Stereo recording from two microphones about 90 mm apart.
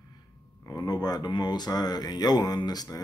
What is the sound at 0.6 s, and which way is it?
Speech, 45° left (ahead or behind).